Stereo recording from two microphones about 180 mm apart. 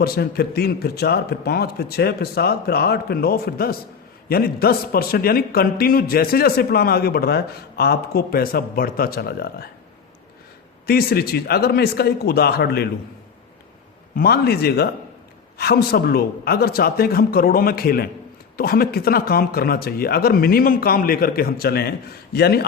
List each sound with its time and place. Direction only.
0.0 s a man's voice: 60° left (ahead or behind)
10.8 s a man's voice: 60° left (ahead or behind)
14.2 s a man's voice: 60° left (ahead or behind)